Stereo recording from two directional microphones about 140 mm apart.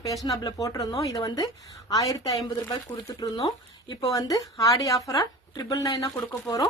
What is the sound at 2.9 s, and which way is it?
Speech, 15° left (ahead or behind).